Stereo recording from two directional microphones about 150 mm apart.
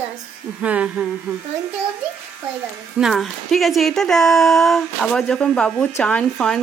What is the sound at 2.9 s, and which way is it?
A woman's voice, centre (ahead or behind).